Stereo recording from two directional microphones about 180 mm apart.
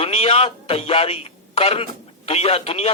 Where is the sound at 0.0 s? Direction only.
35° left (ahead or behind).